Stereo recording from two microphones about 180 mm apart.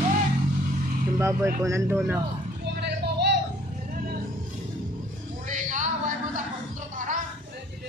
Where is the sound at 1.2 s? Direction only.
15° right (ahead or behind).